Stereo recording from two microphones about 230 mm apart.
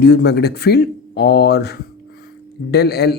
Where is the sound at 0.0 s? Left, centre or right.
Left.